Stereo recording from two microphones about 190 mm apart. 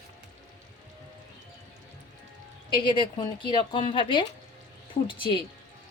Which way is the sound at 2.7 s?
25° left (ahead or behind).